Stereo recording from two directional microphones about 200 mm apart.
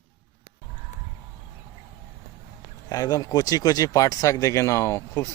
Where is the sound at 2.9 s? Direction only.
20° left (ahead or behind).